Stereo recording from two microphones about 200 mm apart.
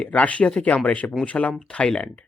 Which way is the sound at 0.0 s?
5° left (ahead or behind).